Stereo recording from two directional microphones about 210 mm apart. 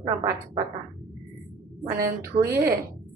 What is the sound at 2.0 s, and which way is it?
Speech, 15° right (ahead or behind).